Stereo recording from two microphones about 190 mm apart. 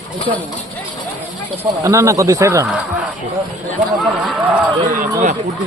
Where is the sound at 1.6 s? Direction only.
15° right (ahead or behind).